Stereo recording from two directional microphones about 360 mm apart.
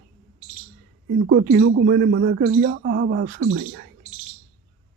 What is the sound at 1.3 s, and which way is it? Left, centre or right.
Speech, right.